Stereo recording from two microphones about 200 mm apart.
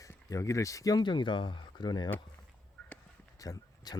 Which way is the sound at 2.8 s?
5° left (ahead or behind).